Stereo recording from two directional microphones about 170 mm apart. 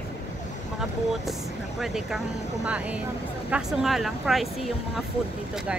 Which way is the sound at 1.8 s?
Centre (ahead or behind).